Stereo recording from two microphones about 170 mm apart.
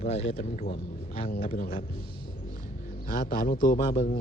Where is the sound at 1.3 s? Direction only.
55° left (ahead or behind).